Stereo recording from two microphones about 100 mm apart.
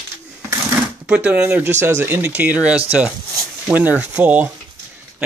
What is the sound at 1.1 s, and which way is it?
Speech, 10° right (ahead or behind).